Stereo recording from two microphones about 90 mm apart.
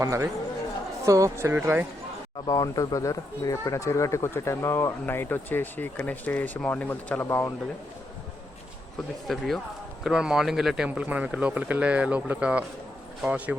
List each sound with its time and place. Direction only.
0.0 s speech: 35° right (ahead or behind)
1.5 s speech: 20° right (ahead or behind)
2.5 s speech: 45° left (ahead or behind); by 7.5 s 25° left (ahead or behind)
9.2 s speech: centre (ahead or behind)
10.8 s speech: 15° right (ahead or behind)